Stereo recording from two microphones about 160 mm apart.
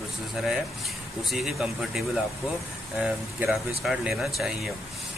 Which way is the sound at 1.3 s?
Centre (ahead or behind).